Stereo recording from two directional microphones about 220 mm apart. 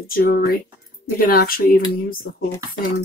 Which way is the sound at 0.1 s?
45° left (ahead or behind).